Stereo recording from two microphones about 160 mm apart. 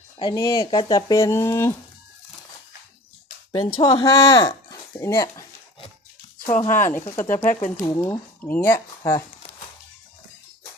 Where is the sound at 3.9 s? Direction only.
20° left (ahead or behind).